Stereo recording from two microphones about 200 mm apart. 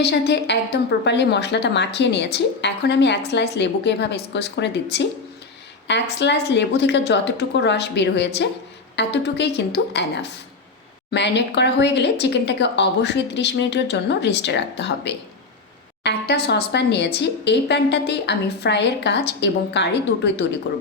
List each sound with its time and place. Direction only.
0.0 s a woman's voice: 55° left (ahead or behind)